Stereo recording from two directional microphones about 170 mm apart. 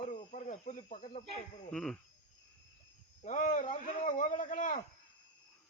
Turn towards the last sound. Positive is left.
turn(degrees=50)  # may be behind; listen again after turning